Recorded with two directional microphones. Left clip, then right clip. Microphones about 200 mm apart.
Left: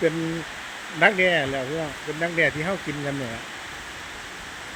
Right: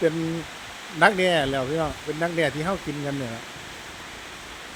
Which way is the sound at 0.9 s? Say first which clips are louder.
Even; 20° right (ahead or behind).